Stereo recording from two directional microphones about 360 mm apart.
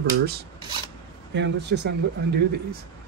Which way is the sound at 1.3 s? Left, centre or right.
Right.